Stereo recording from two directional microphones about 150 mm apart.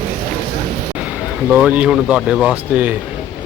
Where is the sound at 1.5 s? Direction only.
10° right (ahead or behind).